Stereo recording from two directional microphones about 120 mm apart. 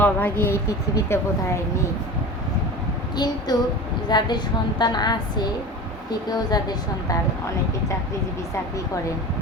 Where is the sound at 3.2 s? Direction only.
35° left (ahead or behind).